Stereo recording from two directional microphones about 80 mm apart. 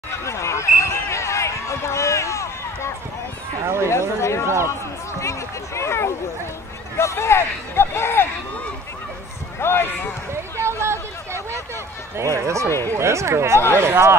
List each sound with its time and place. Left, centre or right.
0.2 s a sound: left
3.6 s speech: right
4.2 s speech: left
9.6 s speech: left
10.6 s a sound: right
12.2 s speech: right